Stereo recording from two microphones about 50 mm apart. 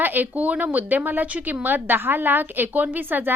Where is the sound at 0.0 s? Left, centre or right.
Right.